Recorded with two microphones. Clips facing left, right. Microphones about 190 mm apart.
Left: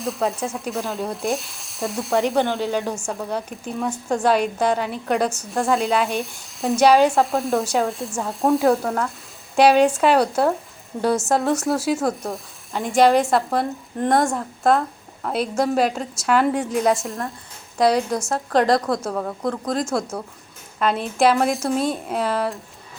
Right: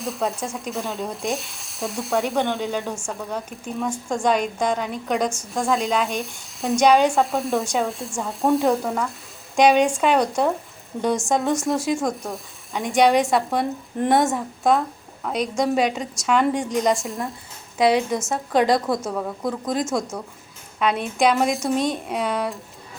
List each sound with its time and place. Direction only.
0.0 s speech: centre (ahead or behind)